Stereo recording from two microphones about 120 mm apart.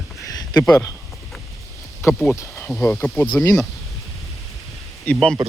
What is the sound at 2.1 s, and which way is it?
Speech, centre (ahead or behind).